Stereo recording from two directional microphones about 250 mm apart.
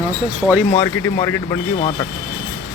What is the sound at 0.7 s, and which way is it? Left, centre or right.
Speech, centre.